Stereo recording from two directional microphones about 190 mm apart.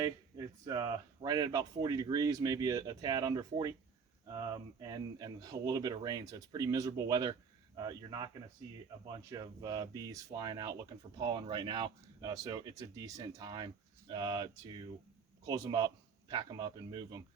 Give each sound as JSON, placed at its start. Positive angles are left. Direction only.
{"t": 0.0, "sound": "speech", "side_deg": -20}